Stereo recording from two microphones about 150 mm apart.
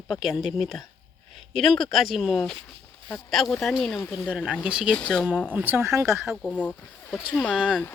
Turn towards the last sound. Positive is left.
turn(degrees=5)  # may be behind; listen again after turning